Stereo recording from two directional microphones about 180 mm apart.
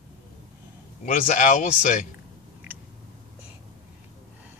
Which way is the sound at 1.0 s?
45° left (ahead or behind).